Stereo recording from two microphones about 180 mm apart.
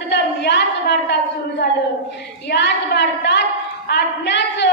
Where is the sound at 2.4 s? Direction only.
70° left (ahead or behind).